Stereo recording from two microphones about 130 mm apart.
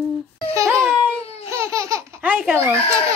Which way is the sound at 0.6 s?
25° right (ahead or behind).